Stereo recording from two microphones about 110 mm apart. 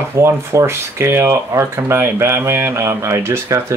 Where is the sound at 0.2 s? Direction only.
25° right (ahead or behind).